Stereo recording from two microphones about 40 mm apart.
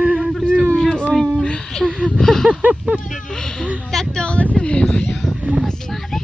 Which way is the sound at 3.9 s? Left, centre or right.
Left.